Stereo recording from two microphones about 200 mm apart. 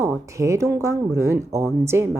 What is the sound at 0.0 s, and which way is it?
Speech, 15° right (ahead or behind).